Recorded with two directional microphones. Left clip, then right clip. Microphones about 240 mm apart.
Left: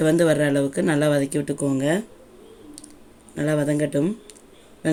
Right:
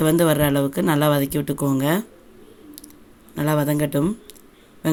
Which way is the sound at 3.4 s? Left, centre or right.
Centre.